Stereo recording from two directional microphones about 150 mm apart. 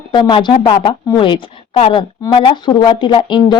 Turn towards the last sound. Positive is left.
turn(degrees=30)  # may be behind; listen again after turning